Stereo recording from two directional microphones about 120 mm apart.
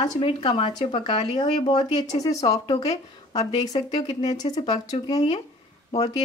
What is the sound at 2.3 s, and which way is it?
Speech, 65° left (ahead or behind).